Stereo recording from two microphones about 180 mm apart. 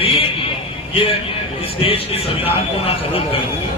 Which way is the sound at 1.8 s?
30° left (ahead or behind).